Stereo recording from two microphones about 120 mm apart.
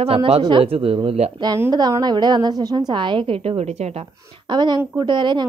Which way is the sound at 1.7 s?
35° right (ahead or behind).